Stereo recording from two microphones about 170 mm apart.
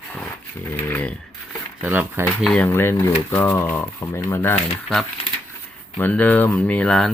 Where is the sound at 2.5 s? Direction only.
10° left (ahead or behind).